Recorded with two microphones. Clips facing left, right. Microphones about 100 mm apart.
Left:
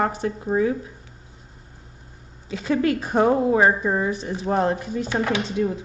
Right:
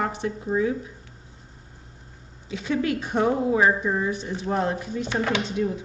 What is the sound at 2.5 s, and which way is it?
A woman's voice, 45° left (ahead or behind).